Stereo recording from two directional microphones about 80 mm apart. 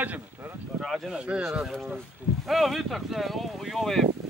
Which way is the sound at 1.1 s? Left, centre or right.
Centre.